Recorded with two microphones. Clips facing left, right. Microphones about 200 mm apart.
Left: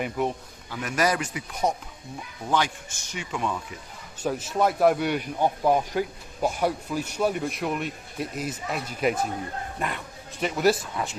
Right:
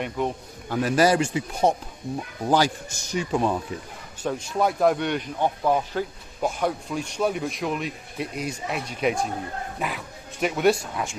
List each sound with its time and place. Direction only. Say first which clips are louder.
0.0 s a man's voice: even; centre (ahead or behind)
0.8 s speech: right 6 dB; 30° right (ahead or behind)
4.2 s a man's voice: even; 5° left (ahead or behind)